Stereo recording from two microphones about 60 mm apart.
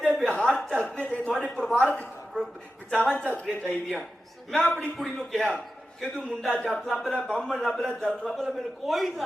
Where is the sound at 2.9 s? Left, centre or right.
Left.